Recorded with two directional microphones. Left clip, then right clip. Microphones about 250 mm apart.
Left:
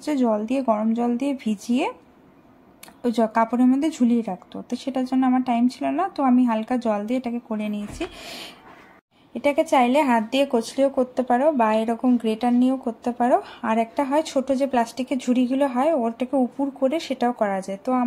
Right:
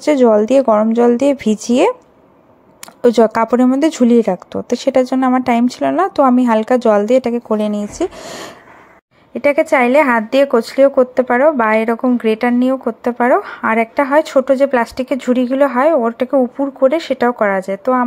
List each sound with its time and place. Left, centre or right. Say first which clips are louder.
0.0 s speech: right 12 dB; right
3.0 s speech: right 10 dB; right